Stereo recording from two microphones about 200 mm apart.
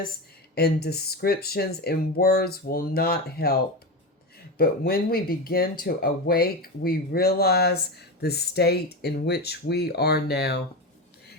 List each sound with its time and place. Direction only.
0.5 s speech: 50° left (ahead or behind)
4.5 s speech: 50° left (ahead or behind)